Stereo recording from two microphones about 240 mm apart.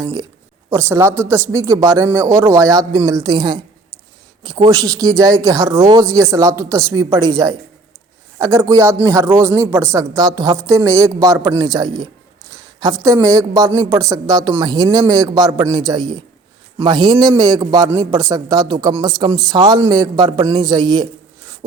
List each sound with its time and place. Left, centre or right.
0.0 s a man's voice: centre